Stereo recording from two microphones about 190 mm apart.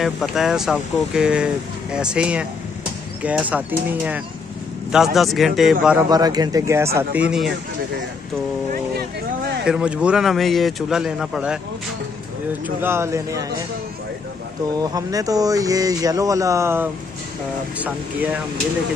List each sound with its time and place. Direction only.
0.0 s speech: centre (ahead or behind)
6.0 s speech: 20° right (ahead or behind)
7.2 s speech: 5° right (ahead or behind)
9.7 s speech: 5° right (ahead or behind)
12.6 s speech: 10° right (ahead or behind)
14.8 s speech: 20° right (ahead or behind)